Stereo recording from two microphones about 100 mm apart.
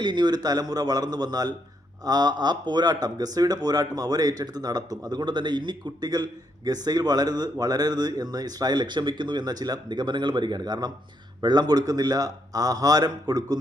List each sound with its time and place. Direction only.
0.0 s speech: 50° right (ahead or behind)